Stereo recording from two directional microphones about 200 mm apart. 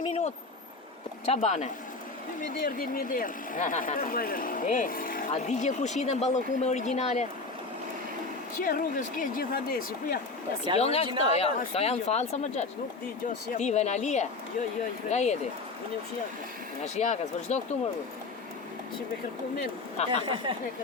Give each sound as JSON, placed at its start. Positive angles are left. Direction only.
{"t": 1.3, "sound": "speech", "side_deg": 35}
{"t": 8.6, "sound": "speech", "side_deg": 40}
{"t": 10.8, "sound": "speech", "side_deg": 30}
{"t": 16.8, "sound": "speech", "side_deg": 35}
{"t": 20.1, "sound": "speech", "side_deg": -25}